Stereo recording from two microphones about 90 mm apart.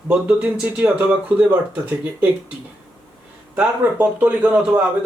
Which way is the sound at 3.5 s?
15° right (ahead or behind).